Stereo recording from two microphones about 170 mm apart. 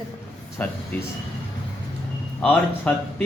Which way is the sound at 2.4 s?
10° left (ahead or behind).